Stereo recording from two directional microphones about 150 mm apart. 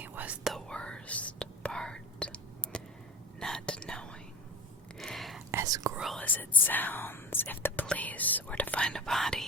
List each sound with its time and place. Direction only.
0.0 s whispering: 10° right (ahead or behind)
0.5 s whispering: 5° left (ahead or behind)
4.9 s a sound: centre (ahead or behind)
5.5 s whispering: 20° right (ahead or behind)
5.9 s whispering: 5° right (ahead or behind)
6.1 s whispering: 10° left (ahead or behind)
6.7 s speech: 10° left (ahead or behind)